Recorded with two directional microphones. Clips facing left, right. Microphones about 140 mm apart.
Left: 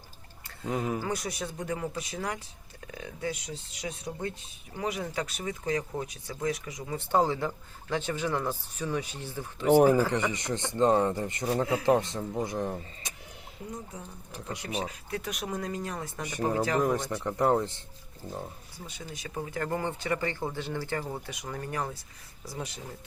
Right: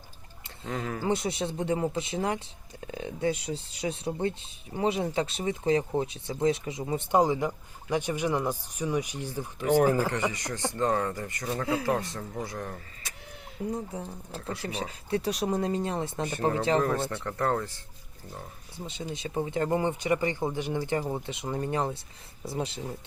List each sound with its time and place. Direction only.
0.7 s speech: 20° left (ahead or behind)
1.0 s speech: 25° right (ahead or behind)
9.6 s speech: 15° left (ahead or behind)
13.7 s speech: 30° right (ahead or behind)
14.3 s speech: 15° left (ahead or behind)
14.8 s speech: 30° right (ahead or behind)
16.8 s speech: 15° left (ahead or behind)
18.8 s speech: 25° right (ahead or behind)